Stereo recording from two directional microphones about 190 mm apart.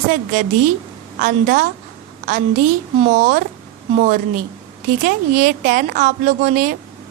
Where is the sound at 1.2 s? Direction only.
45° right (ahead or behind).